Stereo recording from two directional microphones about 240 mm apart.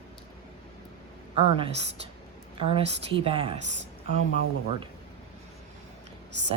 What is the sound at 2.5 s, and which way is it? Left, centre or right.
Speech, right.